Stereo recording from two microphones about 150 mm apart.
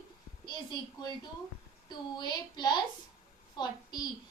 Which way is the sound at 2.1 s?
25° left (ahead or behind).